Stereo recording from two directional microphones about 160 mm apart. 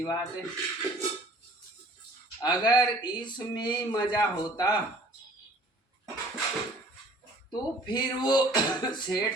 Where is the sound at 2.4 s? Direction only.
25° left (ahead or behind).